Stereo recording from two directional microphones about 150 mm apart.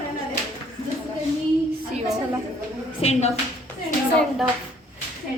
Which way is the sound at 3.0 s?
45° left (ahead or behind).